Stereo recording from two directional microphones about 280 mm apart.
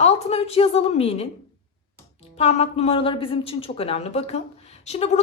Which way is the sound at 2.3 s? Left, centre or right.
Left.